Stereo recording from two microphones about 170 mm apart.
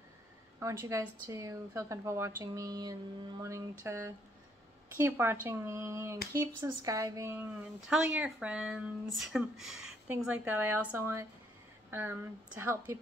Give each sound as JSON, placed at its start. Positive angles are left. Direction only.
{"t": 0.6, "sound": "speech", "side_deg": -15}